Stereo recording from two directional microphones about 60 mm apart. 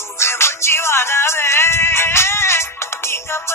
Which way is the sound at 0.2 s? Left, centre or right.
Left.